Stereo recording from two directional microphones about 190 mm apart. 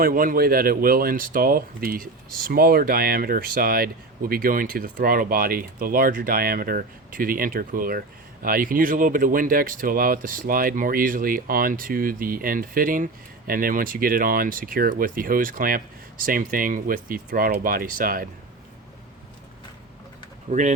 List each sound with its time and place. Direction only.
0.0 s speech: 50° right (ahead or behind)
20.5 s speech: 40° right (ahead or behind)